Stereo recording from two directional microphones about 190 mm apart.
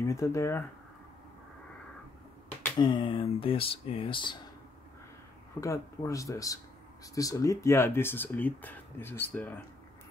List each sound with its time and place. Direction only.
0.0 s speech: 15° left (ahead or behind)
2.8 s speech: 25° left (ahead or behind)
5.6 s speech: 15° left (ahead or behind)